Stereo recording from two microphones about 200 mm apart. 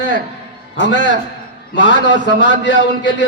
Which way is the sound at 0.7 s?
65° left (ahead or behind).